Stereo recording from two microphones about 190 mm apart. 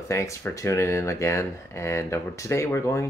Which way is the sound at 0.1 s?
15° left (ahead or behind).